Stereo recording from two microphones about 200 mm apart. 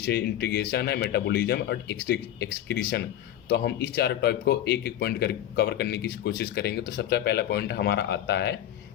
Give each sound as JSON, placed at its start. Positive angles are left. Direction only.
{"t": 0.0, "sound": "speech", "side_deg": 55}